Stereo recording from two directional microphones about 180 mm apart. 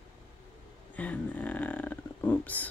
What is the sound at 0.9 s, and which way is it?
Speech, 10° left (ahead or behind).